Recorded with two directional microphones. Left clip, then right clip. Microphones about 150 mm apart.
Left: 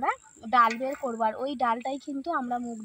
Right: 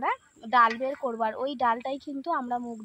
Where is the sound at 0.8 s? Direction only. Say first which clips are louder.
Even; 30° right (ahead or behind).